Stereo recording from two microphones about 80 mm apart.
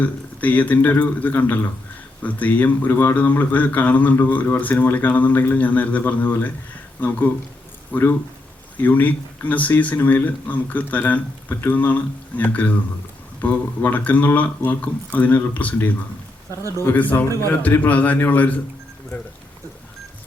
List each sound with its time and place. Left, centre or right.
0.0 s speech: centre
7.9 s speech: centre